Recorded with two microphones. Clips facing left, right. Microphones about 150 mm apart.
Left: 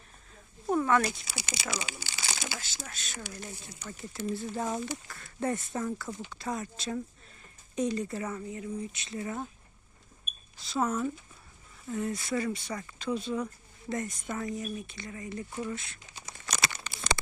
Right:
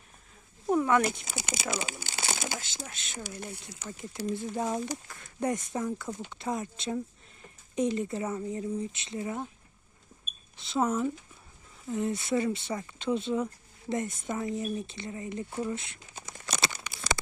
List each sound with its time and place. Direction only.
0.7 s speech: 15° right (ahead or behind)
1.2 s speech: 50° right (ahead or behind)
1.9 s crumpling: 50° right (ahead or behind)
2.6 s speech: 20° right (ahead or behind)
3.4 s speech: 75° right (ahead or behind)
3.8 s speech: 20° right (ahead or behind)
10.6 s speech: 20° right (ahead or behind)